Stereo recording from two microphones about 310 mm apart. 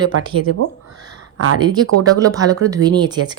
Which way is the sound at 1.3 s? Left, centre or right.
Right.